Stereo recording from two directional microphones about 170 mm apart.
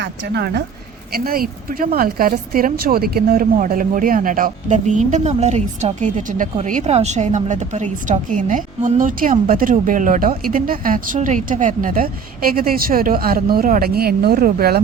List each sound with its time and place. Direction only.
0.0 s speech: 75° right (ahead or behind)
1.1 s speech: 60° right (ahead or behind)